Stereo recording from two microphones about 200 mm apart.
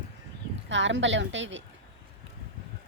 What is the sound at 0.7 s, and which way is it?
Speech, 65° right (ahead or behind).